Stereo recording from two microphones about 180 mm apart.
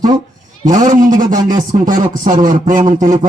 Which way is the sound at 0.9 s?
45° right (ahead or behind).